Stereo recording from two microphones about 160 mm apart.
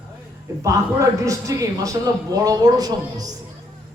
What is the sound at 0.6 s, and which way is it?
A man's voice, 20° right (ahead or behind).